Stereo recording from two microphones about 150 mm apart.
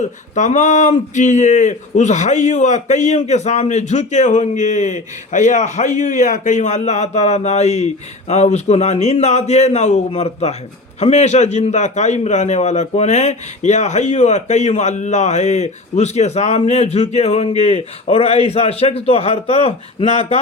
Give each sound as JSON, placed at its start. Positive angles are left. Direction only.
{"t": 0.0, "sound": "a man's voice", "side_deg": 55}